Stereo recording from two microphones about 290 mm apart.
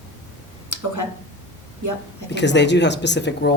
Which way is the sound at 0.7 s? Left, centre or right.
Right.